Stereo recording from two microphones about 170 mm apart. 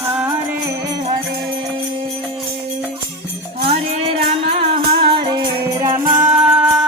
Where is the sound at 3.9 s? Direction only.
35° right (ahead or behind).